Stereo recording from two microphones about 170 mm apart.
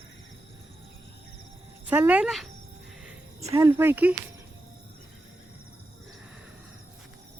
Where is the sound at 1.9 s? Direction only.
10° right (ahead or behind).